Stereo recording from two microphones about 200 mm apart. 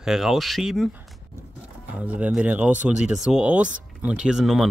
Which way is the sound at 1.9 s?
5° right (ahead or behind).